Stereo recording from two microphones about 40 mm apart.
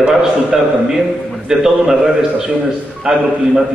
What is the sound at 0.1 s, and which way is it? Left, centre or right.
A man's voice, centre.